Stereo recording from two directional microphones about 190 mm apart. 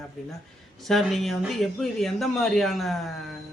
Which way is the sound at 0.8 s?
Centre (ahead or behind).